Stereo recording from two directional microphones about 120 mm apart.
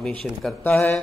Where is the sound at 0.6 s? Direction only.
15° left (ahead or behind).